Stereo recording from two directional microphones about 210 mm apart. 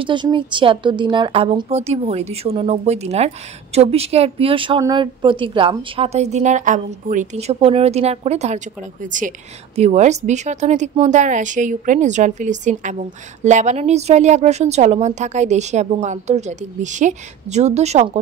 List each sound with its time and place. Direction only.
0.0 s a woman's voice: 20° right (ahead or behind)